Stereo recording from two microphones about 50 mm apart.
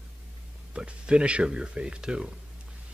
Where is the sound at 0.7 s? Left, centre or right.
Centre.